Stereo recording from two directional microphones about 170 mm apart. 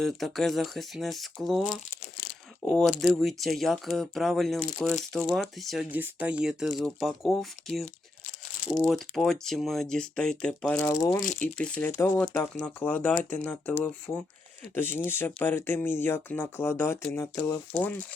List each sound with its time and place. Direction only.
0.0 s speech: centre (ahead or behind)
8.9 s speech: centre (ahead or behind)
10.8 s speech: 15° left (ahead or behind)